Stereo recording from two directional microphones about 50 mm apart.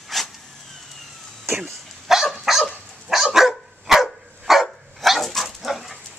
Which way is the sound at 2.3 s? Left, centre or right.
Centre.